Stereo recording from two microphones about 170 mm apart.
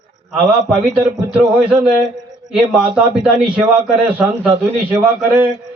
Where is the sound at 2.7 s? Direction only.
5° right (ahead or behind).